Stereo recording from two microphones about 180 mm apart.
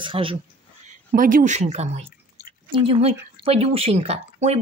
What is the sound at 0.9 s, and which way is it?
A woman's voice, 50° right (ahead or behind).